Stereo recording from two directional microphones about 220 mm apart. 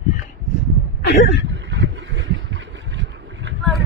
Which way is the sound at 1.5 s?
55° right (ahead or behind).